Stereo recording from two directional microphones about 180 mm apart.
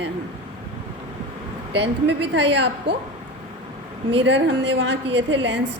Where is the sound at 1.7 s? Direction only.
75° right (ahead or behind).